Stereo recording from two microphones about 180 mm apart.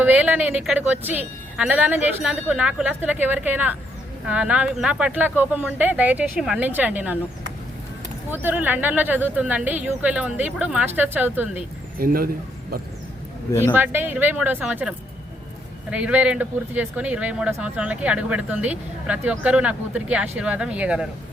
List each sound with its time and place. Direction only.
0.0 s speech: 10° right (ahead or behind)
8.3 s speech: 10° right (ahead or behind)
11.9 s speech: 55° right (ahead or behind)
13.7 s speech: 10° right (ahead or behind)